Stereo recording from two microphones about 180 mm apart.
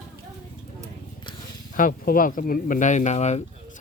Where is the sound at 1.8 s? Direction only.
50° left (ahead or behind).